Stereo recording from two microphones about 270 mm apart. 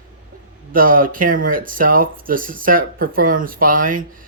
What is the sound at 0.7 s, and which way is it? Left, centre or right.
Speech, right.